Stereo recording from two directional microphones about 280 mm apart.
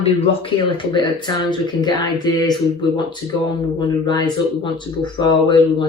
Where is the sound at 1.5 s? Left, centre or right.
Centre.